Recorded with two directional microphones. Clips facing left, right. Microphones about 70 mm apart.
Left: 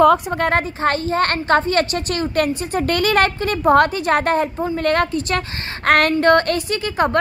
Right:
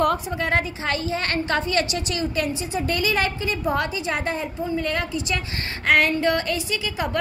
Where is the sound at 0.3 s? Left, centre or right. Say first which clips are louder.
Left 5 dB; left.